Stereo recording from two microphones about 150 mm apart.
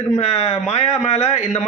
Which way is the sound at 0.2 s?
45° left (ahead or behind).